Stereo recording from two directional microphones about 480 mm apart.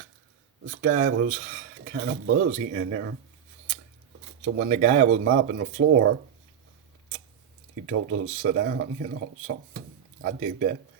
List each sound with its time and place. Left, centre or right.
0.7 s speech: right
0.9 s speech: centre
4.5 s speech: centre
7.9 s speech: right
10.2 s speech: centre